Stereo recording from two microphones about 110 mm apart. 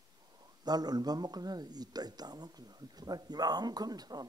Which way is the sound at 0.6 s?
40° right (ahead or behind).